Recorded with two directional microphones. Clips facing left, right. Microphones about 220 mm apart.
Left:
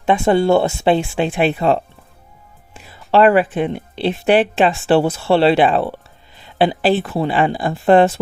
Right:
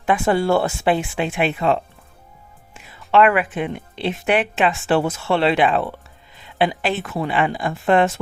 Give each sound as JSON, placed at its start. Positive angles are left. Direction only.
{"t": 0.0, "sound": "speech", "side_deg": 25}
{"t": 3.1, "sound": "speech", "side_deg": 35}